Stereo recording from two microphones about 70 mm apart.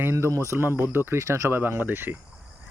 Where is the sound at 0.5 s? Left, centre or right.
Right.